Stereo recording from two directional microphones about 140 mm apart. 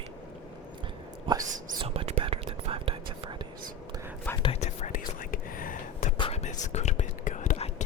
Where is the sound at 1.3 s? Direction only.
35° right (ahead or behind).